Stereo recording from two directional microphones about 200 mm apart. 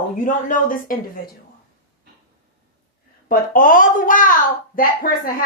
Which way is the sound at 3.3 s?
40° left (ahead or behind).